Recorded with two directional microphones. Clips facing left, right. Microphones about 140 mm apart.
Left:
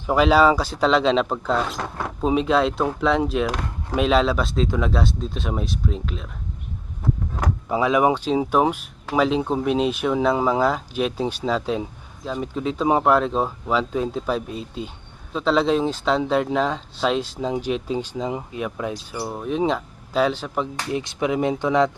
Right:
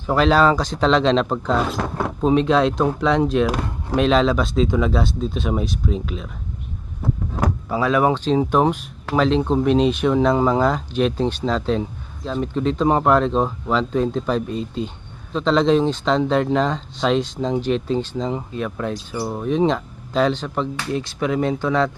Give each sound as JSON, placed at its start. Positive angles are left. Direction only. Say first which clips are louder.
{"t": 0.1, "sound": "speech", "louder": "even", "side_deg": 10}
{"t": 7.7, "sound": "speech", "louder": "even", "side_deg": 15}
{"t": 19.2, "sound": "speech", "louder": "right 4 dB", "side_deg": 0}